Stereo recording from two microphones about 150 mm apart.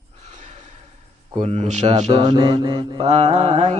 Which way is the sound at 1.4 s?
50° right (ahead or behind).